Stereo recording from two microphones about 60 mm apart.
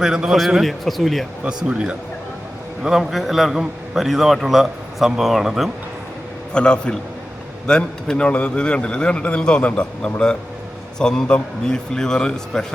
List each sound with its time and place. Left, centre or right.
0.0 s speech: centre
0.3 s a man's voice: centre
1.5 s speech: centre
2.9 s a man's voice: centre
6.5 s a man's voice: centre